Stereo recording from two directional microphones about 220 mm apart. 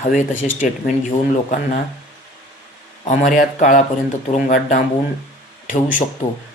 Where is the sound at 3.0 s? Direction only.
35° left (ahead or behind).